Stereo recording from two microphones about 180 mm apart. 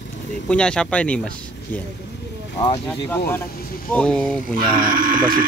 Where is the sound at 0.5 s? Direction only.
5° left (ahead or behind).